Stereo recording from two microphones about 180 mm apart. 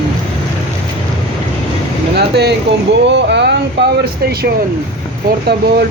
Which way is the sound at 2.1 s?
65° right (ahead or behind).